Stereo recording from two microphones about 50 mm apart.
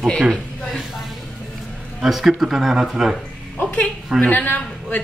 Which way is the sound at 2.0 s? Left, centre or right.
Centre.